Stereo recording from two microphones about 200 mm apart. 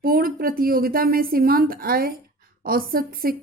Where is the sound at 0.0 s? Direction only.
45° right (ahead or behind).